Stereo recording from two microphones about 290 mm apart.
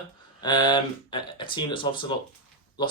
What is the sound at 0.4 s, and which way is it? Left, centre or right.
Speech, centre.